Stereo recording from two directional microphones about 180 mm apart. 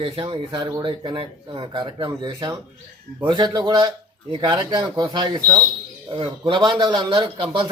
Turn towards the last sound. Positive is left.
turn(degrees=-25)  # may be behind; listen again after turning